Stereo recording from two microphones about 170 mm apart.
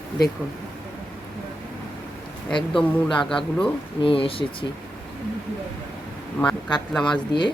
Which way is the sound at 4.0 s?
30° left (ahead or behind).